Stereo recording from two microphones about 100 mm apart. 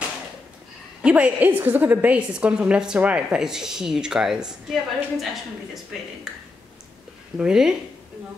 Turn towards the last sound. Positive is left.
turn(degrees=-5)  # may be behind; listen again after turning